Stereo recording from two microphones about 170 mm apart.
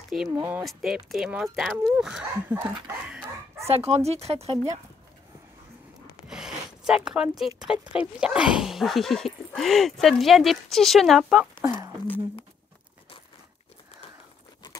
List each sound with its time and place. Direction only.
0.4 s speech: 10° right (ahead or behind)
0.7 s speech: centre (ahead or behind)
3.6 s speech: 35° right (ahead or behind)
6.2 s zipper: 5° right (ahead or behind)
7.6 s speech: 5° right (ahead or behind)
11.6 s speech: 20° right (ahead or behind)